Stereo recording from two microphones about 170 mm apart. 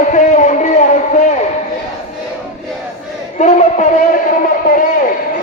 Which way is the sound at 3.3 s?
45° left (ahead or behind).